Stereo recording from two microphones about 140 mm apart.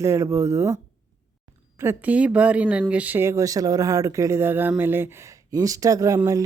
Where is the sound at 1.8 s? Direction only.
15° right (ahead or behind).